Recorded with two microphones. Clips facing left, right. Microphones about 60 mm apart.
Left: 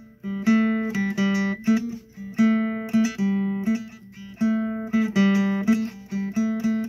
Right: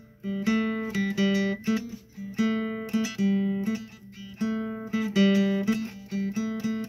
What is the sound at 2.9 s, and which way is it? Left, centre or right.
Music, left.